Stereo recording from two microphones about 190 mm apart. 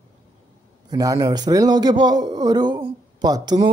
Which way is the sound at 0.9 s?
20° right (ahead or behind).